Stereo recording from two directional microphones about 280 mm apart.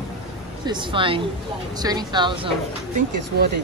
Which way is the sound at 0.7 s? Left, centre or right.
Centre.